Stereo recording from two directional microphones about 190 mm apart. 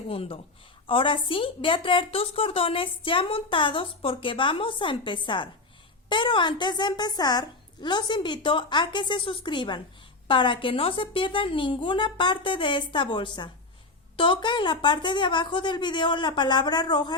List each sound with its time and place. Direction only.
0.1 s a woman's voice: 30° left (ahead or behind)